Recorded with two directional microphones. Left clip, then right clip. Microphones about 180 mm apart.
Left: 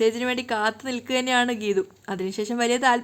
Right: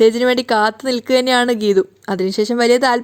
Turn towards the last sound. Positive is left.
turn(degrees=-30)  # may be behind; listen again after turning